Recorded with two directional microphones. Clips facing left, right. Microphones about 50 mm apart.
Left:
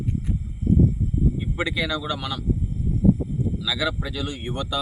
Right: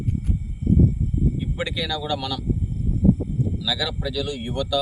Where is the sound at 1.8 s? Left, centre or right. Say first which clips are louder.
Even; centre.